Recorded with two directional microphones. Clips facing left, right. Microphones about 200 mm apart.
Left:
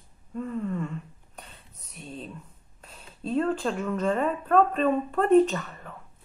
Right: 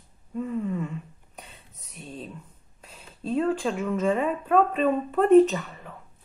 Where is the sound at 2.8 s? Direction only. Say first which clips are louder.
Right 1 dB; centre (ahead or behind).